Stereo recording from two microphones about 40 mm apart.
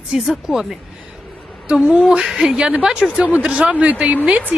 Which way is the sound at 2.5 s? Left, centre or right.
Right.